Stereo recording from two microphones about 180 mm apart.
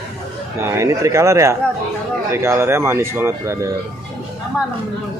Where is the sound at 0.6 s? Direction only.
15° right (ahead or behind).